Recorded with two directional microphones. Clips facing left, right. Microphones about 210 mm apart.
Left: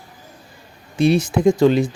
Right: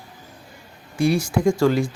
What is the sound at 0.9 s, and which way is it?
Speech, 20° left (ahead or behind).